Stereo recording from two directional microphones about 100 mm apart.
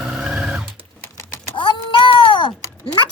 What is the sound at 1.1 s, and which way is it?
Typing, 25° left (ahead or behind).